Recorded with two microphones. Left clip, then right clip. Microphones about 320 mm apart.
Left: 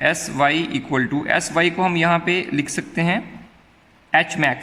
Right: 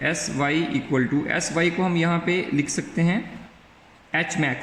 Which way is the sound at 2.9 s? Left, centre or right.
Left.